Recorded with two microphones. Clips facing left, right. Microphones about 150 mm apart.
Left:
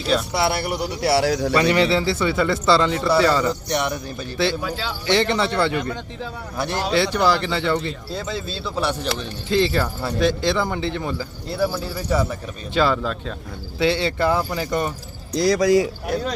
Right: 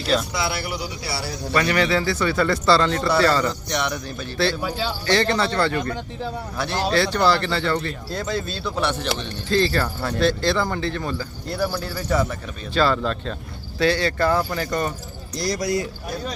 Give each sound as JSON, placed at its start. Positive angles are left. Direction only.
{"t": 0.3, "sound": "speech", "side_deg": 60}
{"t": 1.5, "sound": "speech", "side_deg": 25}
{"t": 8.1, "sound": "speech", "side_deg": 0}
{"t": 9.8, "sound": "speech", "side_deg": 10}
{"t": 11.5, "sound": "speech", "side_deg": 5}
{"t": 13.7, "sound": "speech", "side_deg": 20}
{"t": 15.7, "sound": "speech", "side_deg": 90}